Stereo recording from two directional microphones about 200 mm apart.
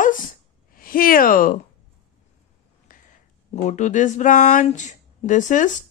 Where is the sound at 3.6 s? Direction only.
35° left (ahead or behind).